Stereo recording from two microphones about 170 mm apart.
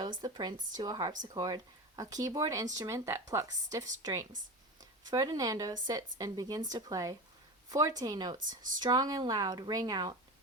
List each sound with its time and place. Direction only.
0.2 s speech: 25° right (ahead or behind)